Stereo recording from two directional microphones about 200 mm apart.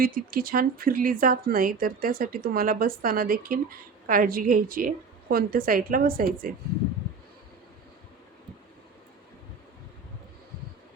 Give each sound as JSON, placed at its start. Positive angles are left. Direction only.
{"t": 0.0, "sound": "a woman's voice", "side_deg": -45}